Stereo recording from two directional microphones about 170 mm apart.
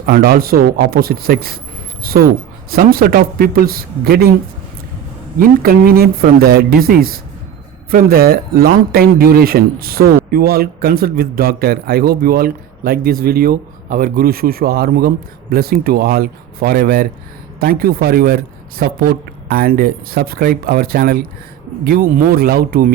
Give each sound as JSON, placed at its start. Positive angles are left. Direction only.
{"t": 0.0, "sound": "a man's voice", "side_deg": -65}
{"t": 5.4, "sound": "a man's voice", "side_deg": -60}